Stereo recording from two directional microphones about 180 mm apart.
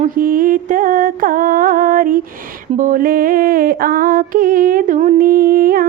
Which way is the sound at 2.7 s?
45° right (ahead or behind).